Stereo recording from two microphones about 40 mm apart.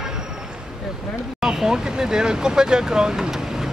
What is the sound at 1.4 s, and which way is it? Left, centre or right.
Speech, centre.